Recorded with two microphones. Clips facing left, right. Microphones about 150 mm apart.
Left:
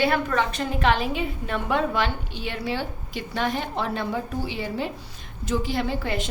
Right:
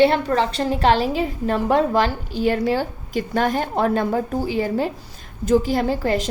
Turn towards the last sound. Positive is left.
turn(degrees=-40)  # may be behind; listen again after turning